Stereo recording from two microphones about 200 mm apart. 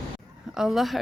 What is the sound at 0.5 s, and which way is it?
Speech, centre (ahead or behind).